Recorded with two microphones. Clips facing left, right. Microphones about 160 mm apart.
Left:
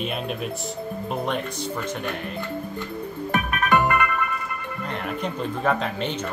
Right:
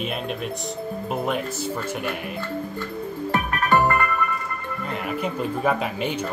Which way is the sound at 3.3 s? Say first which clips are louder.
Even; 20° left (ahead or behind).